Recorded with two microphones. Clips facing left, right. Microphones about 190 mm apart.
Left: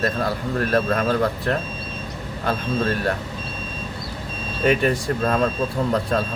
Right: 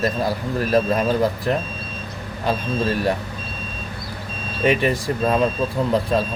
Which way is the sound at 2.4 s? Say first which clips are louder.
Right 1 dB; 10° right (ahead or behind).